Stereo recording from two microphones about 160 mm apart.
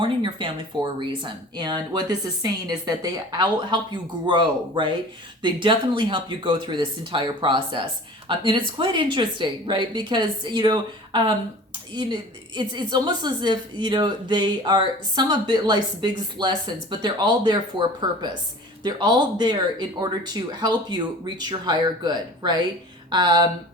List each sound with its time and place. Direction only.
0.2 s a woman's voice: 30° right (ahead or behind)